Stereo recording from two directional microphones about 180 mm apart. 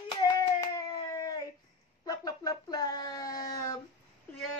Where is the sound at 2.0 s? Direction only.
20° left (ahead or behind).